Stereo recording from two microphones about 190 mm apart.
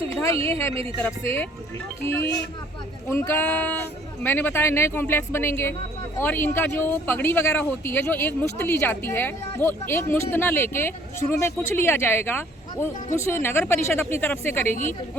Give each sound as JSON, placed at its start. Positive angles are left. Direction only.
{"t": 0.4, "sound": "speech", "side_deg": 15}
{"t": 0.7, "sound": "speech", "side_deg": -30}
{"t": 1.0, "sound": "speech", "side_deg": 10}
{"t": 3.1, "sound": "speech", "side_deg": 15}